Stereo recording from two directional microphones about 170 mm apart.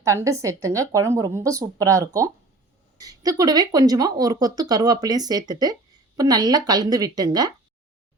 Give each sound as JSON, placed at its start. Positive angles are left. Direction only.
{"t": 0.0, "sound": "speech", "side_deg": -20}